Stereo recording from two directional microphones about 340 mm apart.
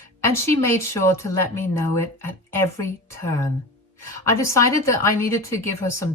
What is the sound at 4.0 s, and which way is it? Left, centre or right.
A woman's voice, centre.